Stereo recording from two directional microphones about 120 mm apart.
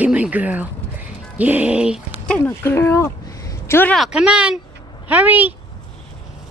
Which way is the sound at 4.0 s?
5° right (ahead or behind).